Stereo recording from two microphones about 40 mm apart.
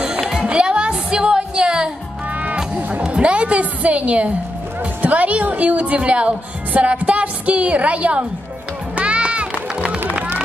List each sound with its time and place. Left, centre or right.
0.5 s music: right
5.0 s a woman's voice: right
8.9 s music: right